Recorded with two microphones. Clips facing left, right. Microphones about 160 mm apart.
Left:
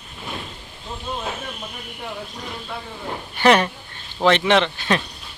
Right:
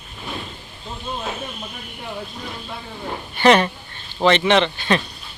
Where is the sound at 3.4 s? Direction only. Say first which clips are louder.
Right 1 dB; 5° left (ahead or behind).